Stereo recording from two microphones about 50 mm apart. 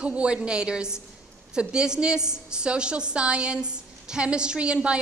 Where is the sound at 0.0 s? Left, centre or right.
Right.